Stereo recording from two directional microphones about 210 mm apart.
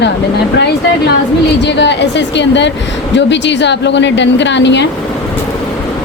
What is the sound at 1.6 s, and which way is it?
A woman's voice, 55° left (ahead or behind).